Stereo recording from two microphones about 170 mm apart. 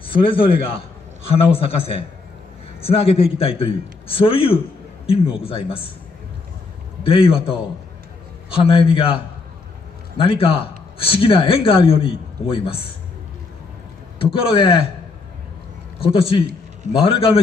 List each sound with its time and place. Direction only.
0.0 s a man's voice: 30° left (ahead or behind)
7.0 s a man's voice: 35° left (ahead or behind)
8.6 s a man's voice: 35° left (ahead or behind)
14.1 s a man's voice: 30° left (ahead or behind)
16.0 s a man's voice: 35° left (ahead or behind)